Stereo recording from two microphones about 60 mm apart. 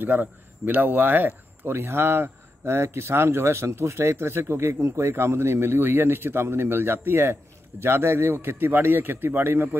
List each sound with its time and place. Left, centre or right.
0.0 s a man's voice: right